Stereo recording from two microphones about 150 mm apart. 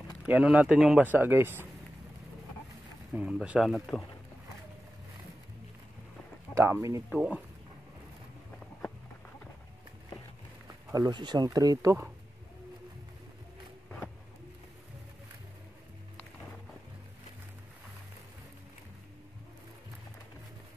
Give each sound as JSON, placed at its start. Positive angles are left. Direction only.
{"t": 0.2, "sound": "speech", "side_deg": -5}
{"t": 3.2, "sound": "speech", "side_deg": -5}
{"t": 6.5, "sound": "speech", "side_deg": -20}
{"t": 7.1, "sound": "speech", "side_deg": -5}
{"t": 10.9, "sound": "speech", "side_deg": -25}